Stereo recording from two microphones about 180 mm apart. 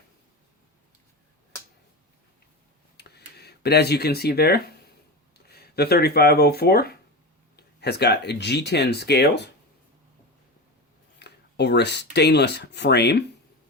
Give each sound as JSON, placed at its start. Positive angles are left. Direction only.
{"t": 3.0, "sound": "a sound", "side_deg": 65}
{"t": 5.5, "sound": "speech", "side_deg": 60}
{"t": 11.2, "sound": "speech", "side_deg": 70}